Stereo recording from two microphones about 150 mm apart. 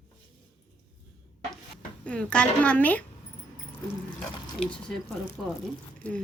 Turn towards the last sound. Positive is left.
turn(degrees=10)  # may be behind; listen again after turning